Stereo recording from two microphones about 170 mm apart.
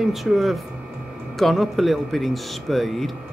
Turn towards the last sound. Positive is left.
turn(degrees=0)  # may be behind; listen again after turning